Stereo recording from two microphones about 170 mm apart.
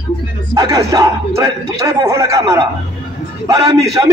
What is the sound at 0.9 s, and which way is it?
A man's voice, 20° right (ahead or behind).